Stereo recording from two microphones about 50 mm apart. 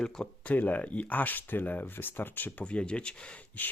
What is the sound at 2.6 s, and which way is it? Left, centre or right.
Speech, left.